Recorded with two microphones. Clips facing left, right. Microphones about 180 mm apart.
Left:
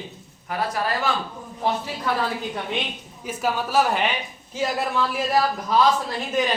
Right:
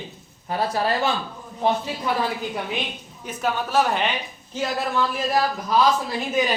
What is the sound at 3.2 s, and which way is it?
Speech, 5° left (ahead or behind).